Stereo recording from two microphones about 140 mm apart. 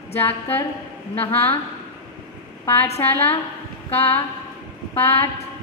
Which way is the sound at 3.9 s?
15° left (ahead or behind).